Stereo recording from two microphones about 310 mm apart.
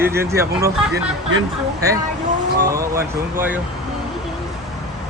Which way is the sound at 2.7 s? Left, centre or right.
Centre.